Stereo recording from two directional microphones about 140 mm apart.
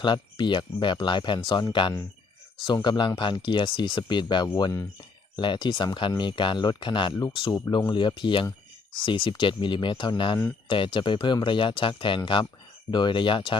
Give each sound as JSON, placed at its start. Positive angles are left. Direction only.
{"t": 0.0, "sound": "speech", "side_deg": 35}